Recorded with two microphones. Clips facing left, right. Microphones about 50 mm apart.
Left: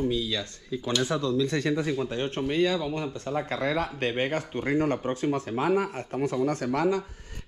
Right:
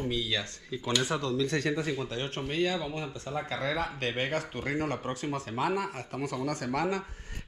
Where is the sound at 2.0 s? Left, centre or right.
Left.